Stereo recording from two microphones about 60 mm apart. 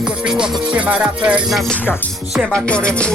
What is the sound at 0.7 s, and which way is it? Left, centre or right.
Music, right.